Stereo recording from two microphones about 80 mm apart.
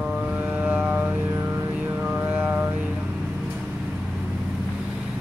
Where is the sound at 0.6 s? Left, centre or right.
Right.